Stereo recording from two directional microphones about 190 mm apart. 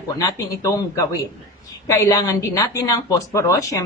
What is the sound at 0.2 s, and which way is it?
A woman's voice, 20° left (ahead or behind).